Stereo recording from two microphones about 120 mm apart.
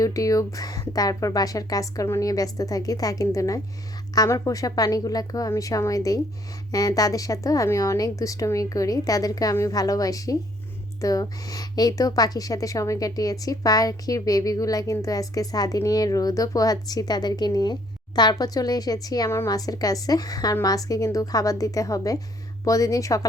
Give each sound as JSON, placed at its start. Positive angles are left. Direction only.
{"t": 0.0, "sound": "a woman's voice", "side_deg": 30}